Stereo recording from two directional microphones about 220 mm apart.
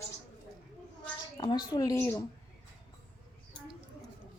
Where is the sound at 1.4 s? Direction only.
20° left (ahead or behind).